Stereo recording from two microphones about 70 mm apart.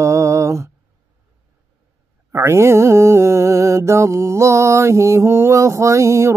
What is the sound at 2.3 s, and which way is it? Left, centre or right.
Mantra, right.